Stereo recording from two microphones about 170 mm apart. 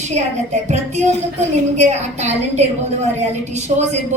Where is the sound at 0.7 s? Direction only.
40° right (ahead or behind).